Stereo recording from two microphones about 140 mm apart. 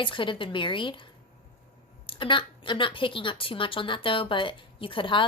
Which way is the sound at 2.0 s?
35° left (ahead or behind).